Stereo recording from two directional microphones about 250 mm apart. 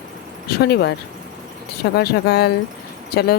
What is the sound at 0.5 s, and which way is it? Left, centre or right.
Speech, left.